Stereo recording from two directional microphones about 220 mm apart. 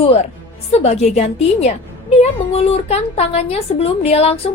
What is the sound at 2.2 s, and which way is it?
A woman's voice, 30° left (ahead or behind).